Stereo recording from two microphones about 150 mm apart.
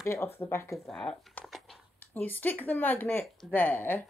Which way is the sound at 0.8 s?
Centre (ahead or behind).